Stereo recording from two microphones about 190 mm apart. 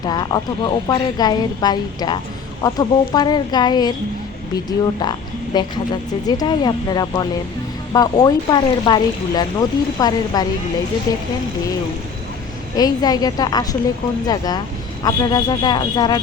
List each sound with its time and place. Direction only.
0.0 s speech: 20° left (ahead or behind)
12.7 s speech: 20° left (ahead or behind)